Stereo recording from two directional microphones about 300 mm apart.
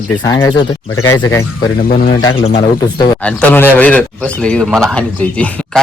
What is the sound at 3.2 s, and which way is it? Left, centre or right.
A man's voice, centre.